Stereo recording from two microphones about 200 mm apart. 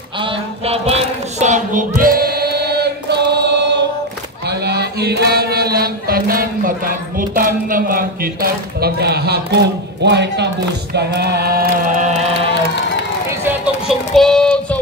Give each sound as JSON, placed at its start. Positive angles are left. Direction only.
{"t": 0.2, "sound": "music", "side_deg": -30}
{"t": 4.5, "sound": "chant", "side_deg": -55}
{"t": 13.5, "sound": "music", "side_deg": 0}